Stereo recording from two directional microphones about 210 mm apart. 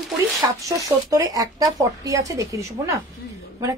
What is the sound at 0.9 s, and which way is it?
Speech, 15° right (ahead or behind).